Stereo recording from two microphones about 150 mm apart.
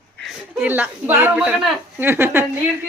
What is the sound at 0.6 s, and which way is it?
Speech, 10° right (ahead or behind).